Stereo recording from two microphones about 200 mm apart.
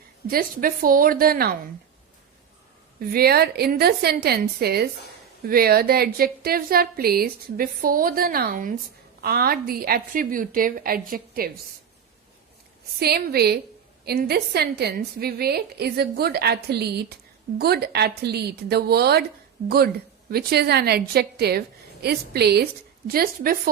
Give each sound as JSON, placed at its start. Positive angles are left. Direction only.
{"t": 0.3, "sound": "a woman's voice", "side_deg": -45}
{"t": 3.0, "sound": "a woman's voice", "side_deg": -50}
{"t": 13.0, "sound": "a woman's voice", "side_deg": -50}